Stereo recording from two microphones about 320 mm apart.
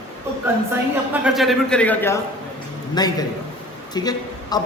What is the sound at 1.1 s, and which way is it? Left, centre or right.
A man's voice, centre.